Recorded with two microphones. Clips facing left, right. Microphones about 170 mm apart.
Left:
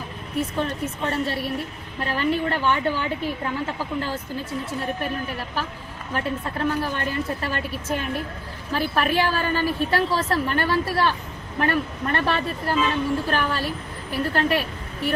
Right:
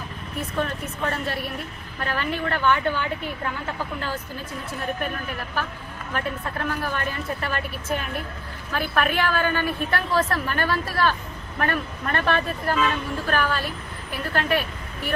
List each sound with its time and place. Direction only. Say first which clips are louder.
0.6 s a woman's voice: left 1 dB; 30° left (ahead or behind)
6.8 s a woman's voice: left 2 dB; 30° left (ahead or behind)
8.7 s a woman's voice: left 2 dB; 30° left (ahead or behind)